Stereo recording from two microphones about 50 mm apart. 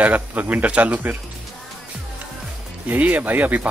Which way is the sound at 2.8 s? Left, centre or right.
Right.